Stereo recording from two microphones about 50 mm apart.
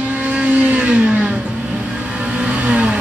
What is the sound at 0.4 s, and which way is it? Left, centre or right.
Vehicle, right.